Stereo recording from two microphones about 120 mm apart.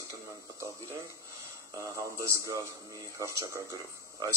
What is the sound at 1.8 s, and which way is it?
A man's voice, 25° right (ahead or behind).